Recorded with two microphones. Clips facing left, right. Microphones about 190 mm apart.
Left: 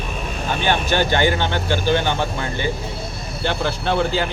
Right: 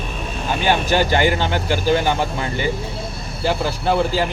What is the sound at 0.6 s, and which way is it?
Speech, 10° right (ahead or behind).